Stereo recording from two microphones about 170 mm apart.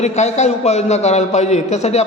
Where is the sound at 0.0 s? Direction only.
40° left (ahead or behind).